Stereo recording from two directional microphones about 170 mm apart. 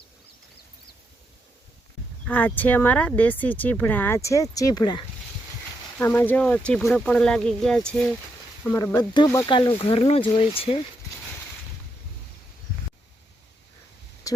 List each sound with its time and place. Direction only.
2.2 s speech: 10° left (ahead or behind); by 5.0 s 25° left (ahead or behind)
6.0 s speech: 10° left (ahead or behind)
8.6 s speech: 15° left (ahead or behind)
9.5 s speech: 30° left (ahead or behind)
14.3 s a sound: 20° left (ahead or behind)